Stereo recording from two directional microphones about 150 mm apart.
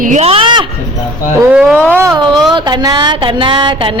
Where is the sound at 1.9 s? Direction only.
15° right (ahead or behind).